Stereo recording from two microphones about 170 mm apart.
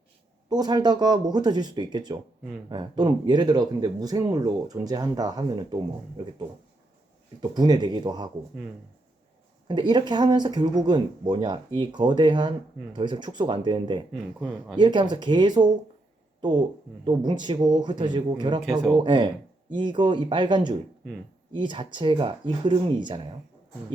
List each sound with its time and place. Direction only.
0.5 s speech: 25° right (ahead or behind)
7.5 s speech: 25° right (ahead or behind)
9.6 s speech: 25° right (ahead or behind)
14.3 s speech: 5° right (ahead or behind)
14.8 s speech: 25° right (ahead or behind)
17.1 s speech: 25° right (ahead or behind)